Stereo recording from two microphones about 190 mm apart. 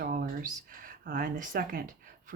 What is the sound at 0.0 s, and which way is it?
Speech, 50° right (ahead or behind).